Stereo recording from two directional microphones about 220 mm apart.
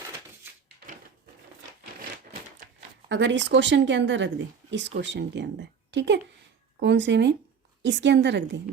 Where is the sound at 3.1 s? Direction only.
55° right (ahead or behind).